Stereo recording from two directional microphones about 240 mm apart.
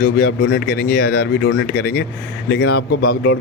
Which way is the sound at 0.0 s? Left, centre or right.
Left.